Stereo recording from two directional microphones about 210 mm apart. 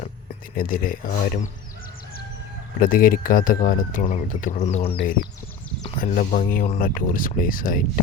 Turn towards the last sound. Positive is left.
turn(degrees=40)  # may be behind; listen again after turning